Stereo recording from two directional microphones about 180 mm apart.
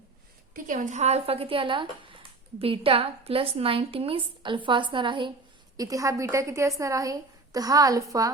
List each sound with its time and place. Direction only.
0.5 s a woman's voice: 45° right (ahead or behind); by 8.3 s 20° right (ahead or behind)